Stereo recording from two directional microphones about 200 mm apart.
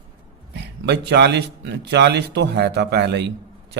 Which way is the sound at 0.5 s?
55° right (ahead or behind).